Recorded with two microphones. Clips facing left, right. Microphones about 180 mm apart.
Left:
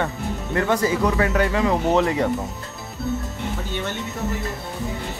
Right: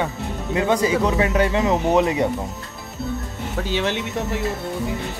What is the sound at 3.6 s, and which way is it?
Speech, 90° right.